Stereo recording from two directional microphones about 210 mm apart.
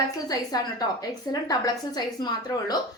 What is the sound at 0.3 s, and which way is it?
A woman's voice, 20° left (ahead or behind).